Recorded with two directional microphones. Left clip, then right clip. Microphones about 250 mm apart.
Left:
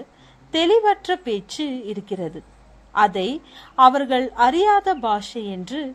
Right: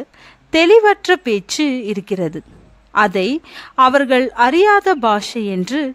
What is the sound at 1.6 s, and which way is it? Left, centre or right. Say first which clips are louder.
Speech: right 9 dB; right.